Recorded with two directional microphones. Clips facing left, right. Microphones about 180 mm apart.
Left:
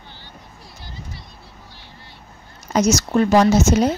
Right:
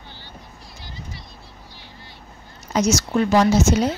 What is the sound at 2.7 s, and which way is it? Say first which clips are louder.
Speech: left 2 dB; 45° left (ahead or behind).